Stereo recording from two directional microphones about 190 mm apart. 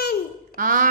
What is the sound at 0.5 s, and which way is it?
Speech, 45° right (ahead or behind).